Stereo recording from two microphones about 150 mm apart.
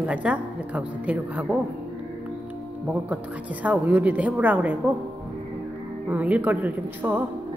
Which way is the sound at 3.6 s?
10° right (ahead or behind).